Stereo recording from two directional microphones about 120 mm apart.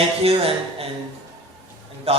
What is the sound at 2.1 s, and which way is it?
Speech, 55° right (ahead or behind).